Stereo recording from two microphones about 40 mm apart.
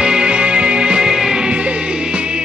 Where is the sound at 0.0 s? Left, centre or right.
Centre.